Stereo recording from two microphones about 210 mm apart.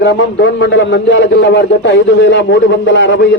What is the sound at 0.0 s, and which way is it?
A man's voice, 60° left (ahead or behind).